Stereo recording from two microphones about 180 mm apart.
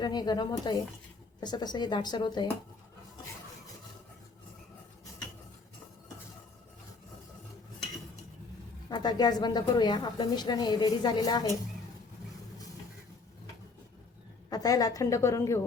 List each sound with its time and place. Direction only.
0.0 s a woman's voice: 25° left (ahead or behind)
8.9 s a woman's voice: 25° left (ahead or behind)
14.5 s a woman's voice: 20° left (ahead or behind)